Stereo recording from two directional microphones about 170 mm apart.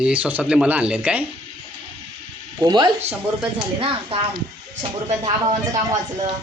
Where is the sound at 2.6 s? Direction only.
25° right (ahead or behind).